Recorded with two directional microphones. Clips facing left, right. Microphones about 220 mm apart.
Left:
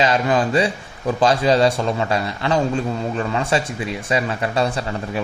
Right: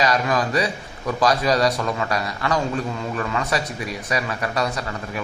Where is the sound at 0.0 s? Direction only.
30° left (ahead or behind).